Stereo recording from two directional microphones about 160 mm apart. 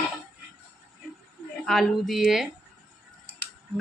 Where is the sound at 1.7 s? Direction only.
Centre (ahead or behind).